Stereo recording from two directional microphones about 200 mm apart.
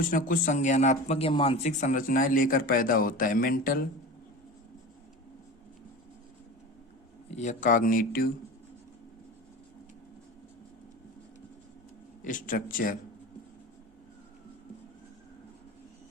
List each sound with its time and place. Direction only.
0.1 s a man's voice: 40° left (ahead or behind)
7.3 s a man's voice: 40° left (ahead or behind)
12.2 s a man's voice: 40° left (ahead or behind)